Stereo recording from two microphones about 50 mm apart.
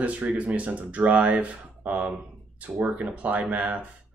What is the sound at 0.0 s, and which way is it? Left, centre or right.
Speech, right.